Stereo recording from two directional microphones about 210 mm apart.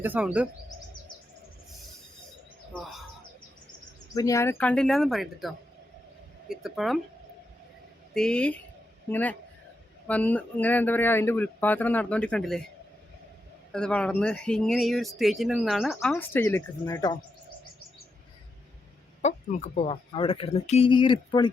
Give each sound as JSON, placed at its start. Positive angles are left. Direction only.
{"t": 0.0, "sound": "speech", "side_deg": -5}
{"t": 4.1, "sound": "speech", "side_deg": 15}
{"t": 8.1, "sound": "speech", "side_deg": 5}
{"t": 13.7, "sound": "speech", "side_deg": 5}
{"t": 19.2, "sound": "speech", "side_deg": 30}